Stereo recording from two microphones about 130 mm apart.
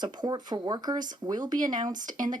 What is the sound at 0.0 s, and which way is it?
Speech, 35° right (ahead or behind).